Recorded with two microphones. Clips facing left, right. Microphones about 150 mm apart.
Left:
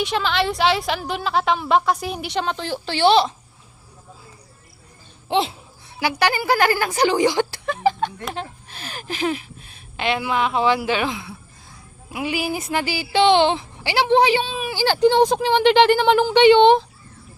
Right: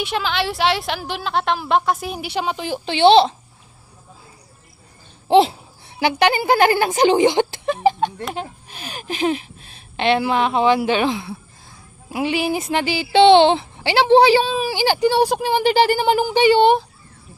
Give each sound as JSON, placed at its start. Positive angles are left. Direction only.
{"t": 0.0, "sound": "a woman's voice", "side_deg": 0}
{"t": 5.3, "sound": "speech", "side_deg": -35}
{"t": 6.0, "sound": "a woman's voice", "side_deg": -25}
{"t": 14.8, "sound": "speech", "side_deg": -10}